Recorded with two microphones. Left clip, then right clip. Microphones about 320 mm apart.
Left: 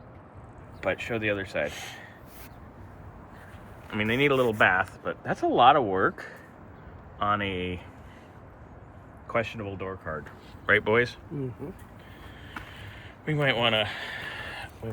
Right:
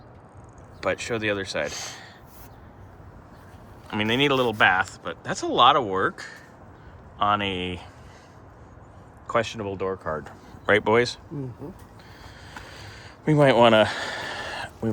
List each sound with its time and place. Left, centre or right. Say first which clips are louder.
0.8 s speech: right 3 dB; centre
1.7 s speech: right 4 dB; centre
3.8 s speech: right 2 dB; centre
9.2 s speech: right 4 dB; centre
13.3 s speech: right 8 dB; centre
13.8 s a sound: right 7 dB; right